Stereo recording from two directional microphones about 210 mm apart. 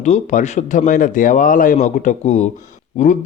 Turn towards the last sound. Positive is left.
turn(degrees=35)  # may be behind; listen again after turning